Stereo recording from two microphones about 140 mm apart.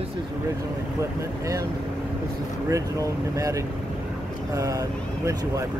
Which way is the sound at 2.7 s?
25° right (ahead or behind).